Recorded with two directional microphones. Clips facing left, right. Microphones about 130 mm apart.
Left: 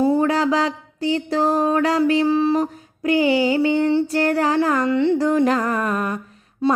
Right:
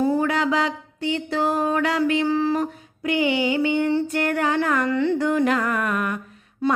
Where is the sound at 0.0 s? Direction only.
30° left (ahead or behind).